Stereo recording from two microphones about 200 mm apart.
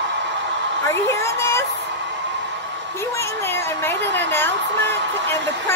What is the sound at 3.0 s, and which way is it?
Speech, 15° left (ahead or behind).